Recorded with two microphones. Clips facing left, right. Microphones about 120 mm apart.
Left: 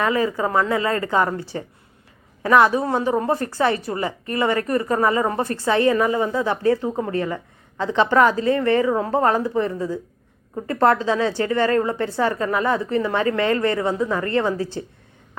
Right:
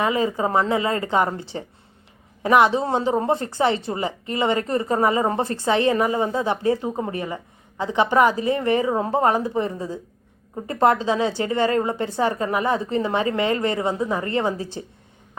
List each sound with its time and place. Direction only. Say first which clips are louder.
0.0 s a woman's voice: left 1 dB; 20° right (ahead or behind)